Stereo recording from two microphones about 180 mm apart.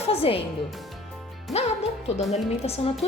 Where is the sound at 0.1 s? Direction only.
30° left (ahead or behind).